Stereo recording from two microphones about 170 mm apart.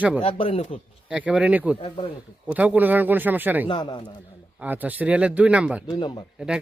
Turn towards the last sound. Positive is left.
turn(degrees=-5)  # may be behind; listen again after turning